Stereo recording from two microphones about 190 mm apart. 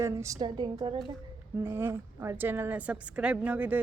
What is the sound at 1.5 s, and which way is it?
A woman's voice, 15° right (ahead or behind).